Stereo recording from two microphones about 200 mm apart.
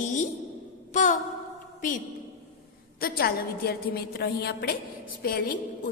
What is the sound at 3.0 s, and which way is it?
A woman's voice, 50° left (ahead or behind).